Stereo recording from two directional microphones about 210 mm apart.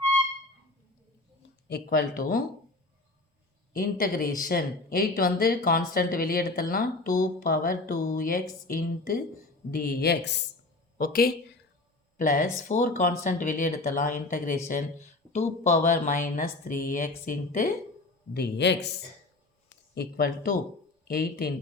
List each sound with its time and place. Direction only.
1.6 s speech: 45° left (ahead or behind)
3.7 s speech: 45° left (ahead or behind)
10.9 s speech: 45° left (ahead or behind)
18.3 s speech: 55° left (ahead or behind)
19.9 s speech: 50° left (ahead or behind)